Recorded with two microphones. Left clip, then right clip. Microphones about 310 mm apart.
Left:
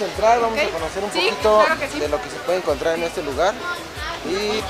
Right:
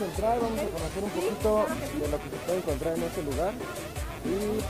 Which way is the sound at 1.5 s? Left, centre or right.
Centre.